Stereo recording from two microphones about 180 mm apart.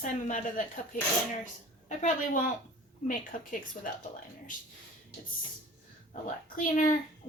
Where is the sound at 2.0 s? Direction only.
45° left (ahead or behind).